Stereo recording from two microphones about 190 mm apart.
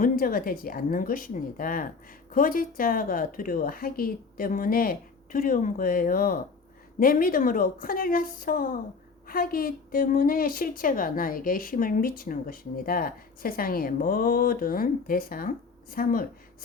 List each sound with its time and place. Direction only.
0.0 s a woman's voice: 50° left (ahead or behind)